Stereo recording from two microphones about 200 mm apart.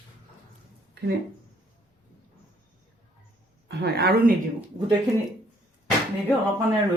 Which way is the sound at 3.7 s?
55° right (ahead or behind).